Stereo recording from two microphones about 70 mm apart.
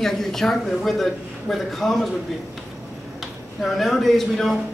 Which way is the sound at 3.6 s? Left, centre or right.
Centre.